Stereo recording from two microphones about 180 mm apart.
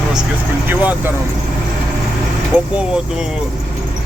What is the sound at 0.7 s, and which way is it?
Speech, 10° right (ahead or behind).